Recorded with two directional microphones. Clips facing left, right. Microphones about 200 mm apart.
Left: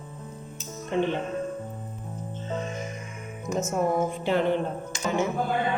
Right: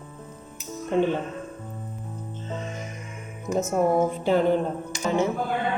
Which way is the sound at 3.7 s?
40° right (ahead or behind).